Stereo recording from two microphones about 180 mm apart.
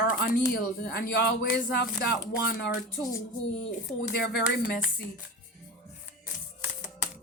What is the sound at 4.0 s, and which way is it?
Speech, 65° left (ahead or behind).